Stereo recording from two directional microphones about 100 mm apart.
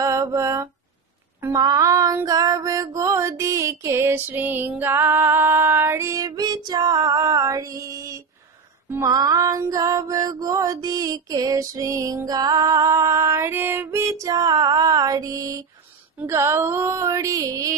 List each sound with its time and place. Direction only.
0.0 s mantra: 30° right (ahead or behind)
1.5 s music: 35° right (ahead or behind); by 13.8 s 20° right (ahead or behind)
13.8 s music: 30° right (ahead or behind)
16.2 s a sound: 25° right (ahead or behind)